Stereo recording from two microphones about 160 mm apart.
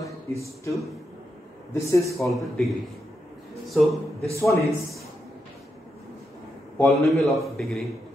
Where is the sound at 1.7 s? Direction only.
20° left (ahead or behind).